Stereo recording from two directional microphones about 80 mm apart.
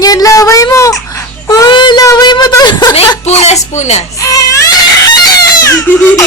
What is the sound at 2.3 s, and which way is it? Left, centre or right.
Child singing, left.